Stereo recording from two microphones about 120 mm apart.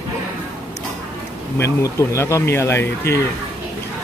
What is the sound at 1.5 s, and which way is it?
A man's voice, 25° left (ahead or behind).